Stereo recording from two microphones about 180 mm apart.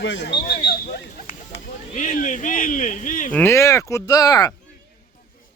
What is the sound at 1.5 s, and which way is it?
Speech, 45° left (ahead or behind).